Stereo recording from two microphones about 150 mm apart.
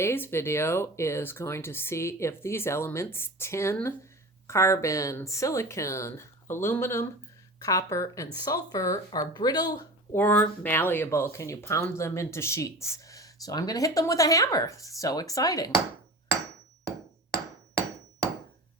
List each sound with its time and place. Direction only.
0.0 s speech: 15° left (ahead or behind)
10.2 s speech: 15° left (ahead or behind)